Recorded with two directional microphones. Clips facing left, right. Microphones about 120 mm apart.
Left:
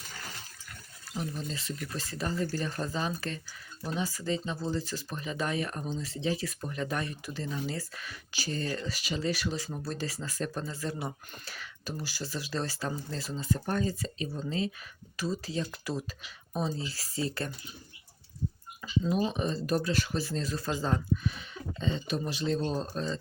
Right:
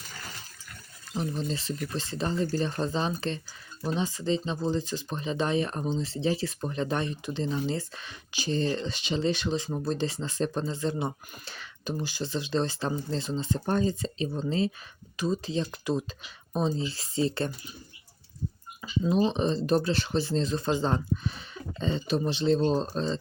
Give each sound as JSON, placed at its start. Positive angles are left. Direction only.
{"t": 1.1, "sound": "speech", "side_deg": -20}
{"t": 18.8, "sound": "speech", "side_deg": -25}